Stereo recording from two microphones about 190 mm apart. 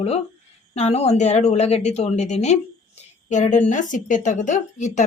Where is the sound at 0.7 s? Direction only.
35° left (ahead or behind).